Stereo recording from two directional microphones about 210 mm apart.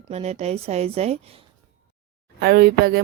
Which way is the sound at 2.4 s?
45° right (ahead or behind).